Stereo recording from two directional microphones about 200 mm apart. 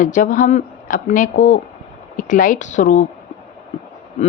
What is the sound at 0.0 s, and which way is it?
Speech, 40° left (ahead or behind).